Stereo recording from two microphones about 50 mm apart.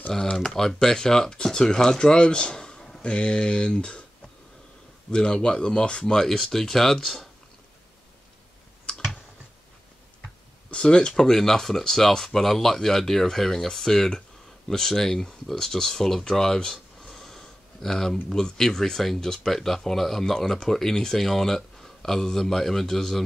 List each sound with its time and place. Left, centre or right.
0.1 s speech: centre
5.1 s speech: centre
8.9 s clicking: centre
10.2 s speech: centre